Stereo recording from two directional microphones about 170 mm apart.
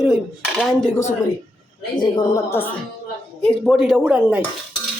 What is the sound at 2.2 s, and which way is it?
Speech, 15° left (ahead or behind).